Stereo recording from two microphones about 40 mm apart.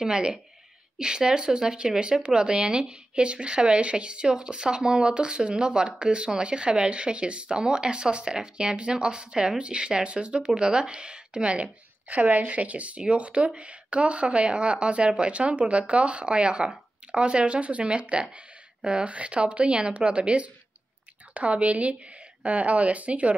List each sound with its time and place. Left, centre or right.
0.0 s speech: right
12.1 s a woman's voice: right